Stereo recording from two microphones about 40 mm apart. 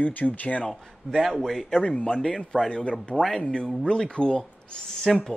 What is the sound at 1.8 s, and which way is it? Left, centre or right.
Speech, left.